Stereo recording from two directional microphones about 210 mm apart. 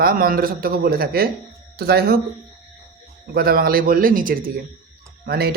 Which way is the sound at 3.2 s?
45° right (ahead or behind).